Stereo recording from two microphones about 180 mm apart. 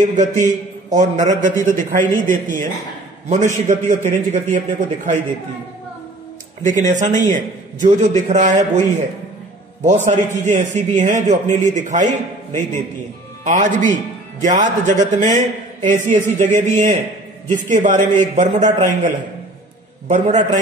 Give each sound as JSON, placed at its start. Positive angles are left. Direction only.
{"t": 0.0, "sound": "a man's voice", "side_deg": -45}
{"t": 6.6, "sound": "a man's voice", "side_deg": -45}